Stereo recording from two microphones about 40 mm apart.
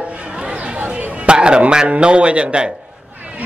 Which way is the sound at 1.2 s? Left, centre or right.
Right.